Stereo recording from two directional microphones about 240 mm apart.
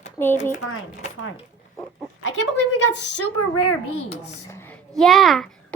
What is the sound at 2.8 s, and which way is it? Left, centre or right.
A woman's voice, left.